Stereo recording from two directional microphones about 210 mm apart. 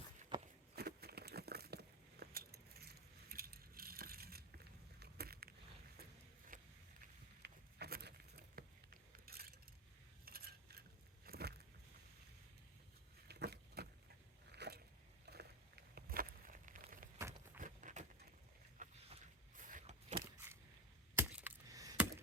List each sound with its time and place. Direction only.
0.3 s walk: 20° right (ahead or behind)
0.8 s a sound: 50° right (ahead or behind)
6.5 s boat: 40° right (ahead or behind)
7.4 s patter: 50° right (ahead or behind)
10.2 s coin: 45° right (ahead or behind)
11.3 s a sound: 50° right (ahead or behind)
13.2 s vehicle: 50° right (ahead or behind)
14.5 s a sound: 50° right (ahead or behind)
17.2 s walk: 15° right (ahead or behind)
17.6 s horse: 40° right (ahead or behind)
18.8 s vehicle: 35° right (ahead or behind)
21.2 s a sound: 10° right (ahead or behind)